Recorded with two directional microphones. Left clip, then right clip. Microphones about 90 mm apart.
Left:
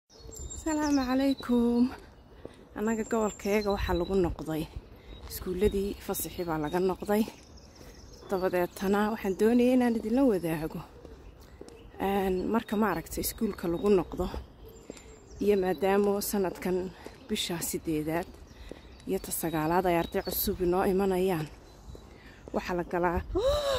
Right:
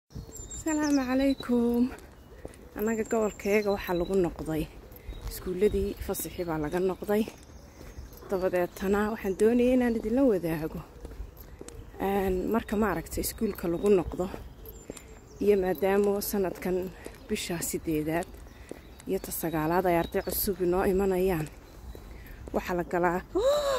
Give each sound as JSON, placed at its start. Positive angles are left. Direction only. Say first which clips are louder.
{"t": 0.7, "sound": "speech", "louder": "right 1 dB", "side_deg": 5}
{"t": 1.7, "sound": "speech", "louder": "even", "side_deg": 35}
{"t": 2.7, "sound": "speech", "louder": "right 2 dB", "side_deg": 20}
{"t": 6.7, "sound": "speech", "louder": "even", "side_deg": 40}
{"t": 12.0, "sound": "speech", "louder": "right 1 dB", "side_deg": 25}
{"t": 19.0, "sound": "speech", "louder": "right 1 dB", "side_deg": 30}
{"t": 22.5, "sound": "speech", "louder": "right 2 dB", "side_deg": 10}